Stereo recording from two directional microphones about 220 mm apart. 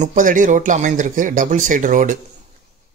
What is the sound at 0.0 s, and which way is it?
Speech, 35° right (ahead or behind).